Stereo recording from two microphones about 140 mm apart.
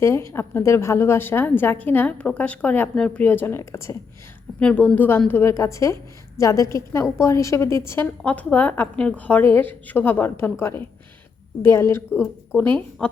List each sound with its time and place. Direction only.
0.0 s a woman's voice: 20° left (ahead or behind)
4.6 s a woman's voice: 10° left (ahead or behind)